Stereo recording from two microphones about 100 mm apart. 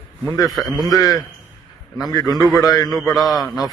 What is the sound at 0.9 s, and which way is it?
Speech, 35° left (ahead or behind).